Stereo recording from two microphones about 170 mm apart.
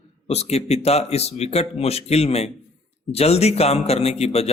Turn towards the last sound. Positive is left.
turn(degrees=35)  # may be behind; listen again after turning